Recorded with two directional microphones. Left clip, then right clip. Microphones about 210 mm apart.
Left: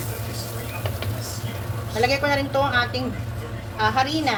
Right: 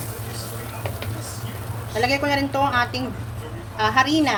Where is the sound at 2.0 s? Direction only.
50° right (ahead or behind).